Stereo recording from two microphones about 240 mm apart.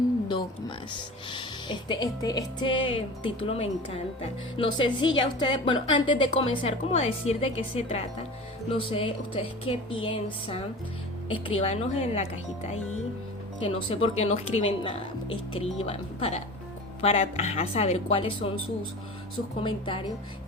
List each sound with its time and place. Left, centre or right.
1.3 s speech: centre
13.6 s speech: left
19.6 s speech: left